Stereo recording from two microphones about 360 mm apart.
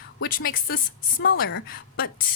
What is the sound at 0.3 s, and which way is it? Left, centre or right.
A woman's voice, left.